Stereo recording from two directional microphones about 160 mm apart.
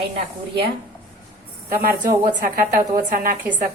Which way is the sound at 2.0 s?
60° right (ahead or behind).